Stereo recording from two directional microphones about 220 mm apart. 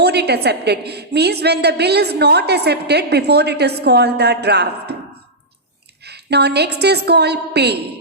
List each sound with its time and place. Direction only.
0.0 s a woman's voice: 50° right (ahead or behind)
6.1 s a woman's voice: 50° right (ahead or behind)